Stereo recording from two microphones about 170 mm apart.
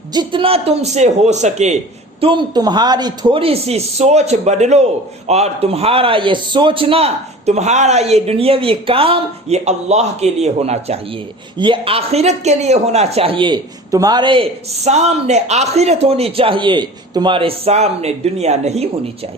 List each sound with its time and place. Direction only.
0.1 s a man's voice: 25° right (ahead or behind)
2.2 s a man's voice: 25° right (ahead or behind)
14.8 s a man's voice: 40° right (ahead or behind)